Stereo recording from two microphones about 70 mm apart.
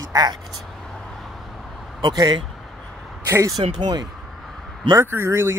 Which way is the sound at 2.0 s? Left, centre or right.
Right.